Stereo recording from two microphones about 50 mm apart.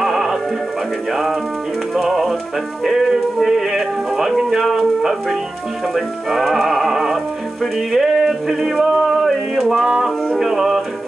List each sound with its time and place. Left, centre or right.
0.0 s music: centre
2.0 s music: centre
2.8 s speech: centre